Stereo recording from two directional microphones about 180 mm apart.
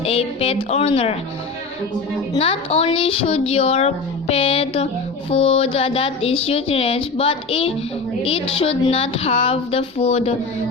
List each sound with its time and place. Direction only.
0.0 s speech: 35° left (ahead or behind)
2.3 s speech: 30° left (ahead or behind)